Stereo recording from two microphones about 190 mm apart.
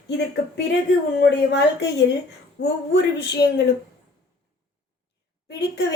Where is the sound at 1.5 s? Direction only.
65° left (ahead or behind).